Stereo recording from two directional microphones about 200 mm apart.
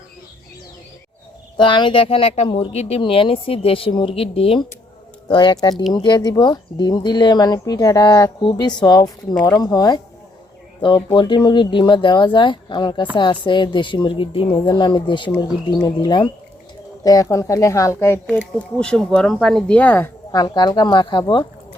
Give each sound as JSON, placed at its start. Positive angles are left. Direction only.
{"t": 1.5, "sound": "speech", "side_deg": 25}
{"t": 20.3, "sound": "speech", "side_deg": 20}